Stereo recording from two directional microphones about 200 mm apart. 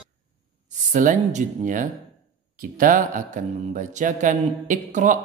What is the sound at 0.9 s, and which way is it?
Speech, 40° right (ahead or behind).